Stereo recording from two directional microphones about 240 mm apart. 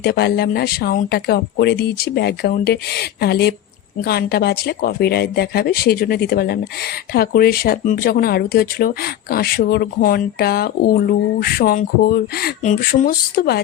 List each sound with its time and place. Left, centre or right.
0.0 s speech: left